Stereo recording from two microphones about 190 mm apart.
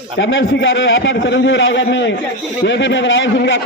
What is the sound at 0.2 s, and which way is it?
A man's voice, 80° left.